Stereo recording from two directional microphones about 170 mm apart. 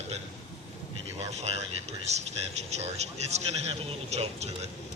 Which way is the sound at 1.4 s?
40° right (ahead or behind).